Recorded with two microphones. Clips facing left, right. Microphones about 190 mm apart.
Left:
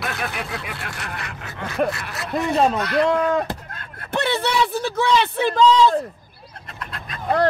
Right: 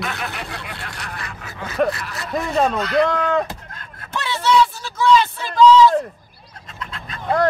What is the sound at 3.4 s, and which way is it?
Speech, 60° left (ahead or behind).